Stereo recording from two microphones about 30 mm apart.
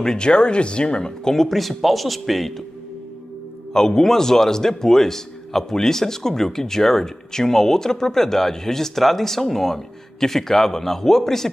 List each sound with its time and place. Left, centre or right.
0.0 s speech: left
1.2 s speech: centre
3.7 s a man's voice: centre